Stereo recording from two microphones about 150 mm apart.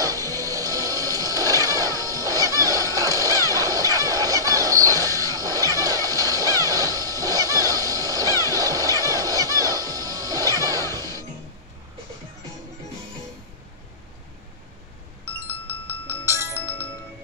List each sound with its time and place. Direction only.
0.0 s music: 25° right (ahead or behind)
15.9 s music: 15° right (ahead or behind)